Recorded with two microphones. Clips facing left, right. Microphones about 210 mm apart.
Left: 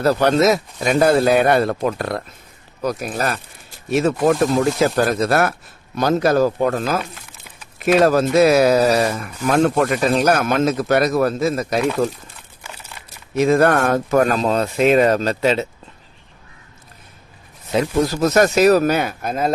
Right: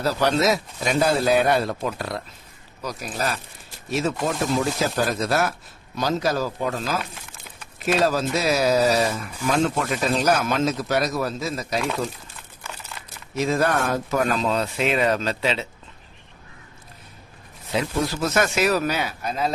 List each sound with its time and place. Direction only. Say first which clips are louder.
0.0 s speech: left 6 dB; 55° left (ahead or behind)
12.6 s a sound: even; 10° left (ahead or behind)
13.3 s speech: left 7 dB; 60° left (ahead or behind)
17.7 s speech: left 6 dB; 45° left (ahead or behind)